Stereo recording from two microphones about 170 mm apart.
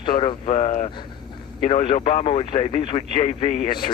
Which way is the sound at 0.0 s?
30° left (ahead or behind).